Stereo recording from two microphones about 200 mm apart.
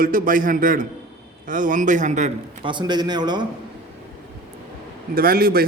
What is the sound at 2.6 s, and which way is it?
Speech, 20° right (ahead or behind).